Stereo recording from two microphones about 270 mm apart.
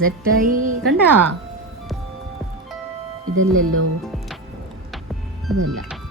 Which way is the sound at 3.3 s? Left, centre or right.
Right.